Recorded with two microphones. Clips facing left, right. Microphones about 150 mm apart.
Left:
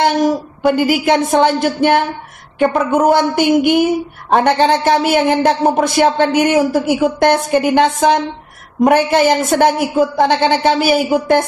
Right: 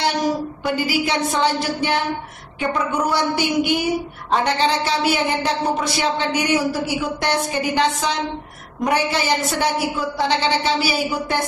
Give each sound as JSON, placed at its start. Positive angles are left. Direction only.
{"t": 0.0, "sound": "a woman's voice", "side_deg": 50}